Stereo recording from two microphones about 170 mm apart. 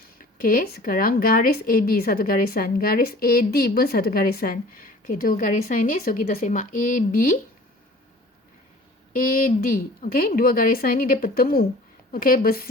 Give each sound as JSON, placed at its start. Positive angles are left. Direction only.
{"t": 0.4, "sound": "a woman's voice", "side_deg": 55}
{"t": 9.1, "sound": "a woman's voice", "side_deg": 55}